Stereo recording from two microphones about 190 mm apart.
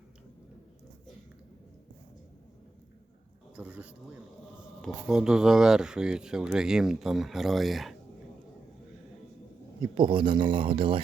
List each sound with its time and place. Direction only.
3.5 s speech: 5° right (ahead or behind)
9.8 s speech: 25° right (ahead or behind)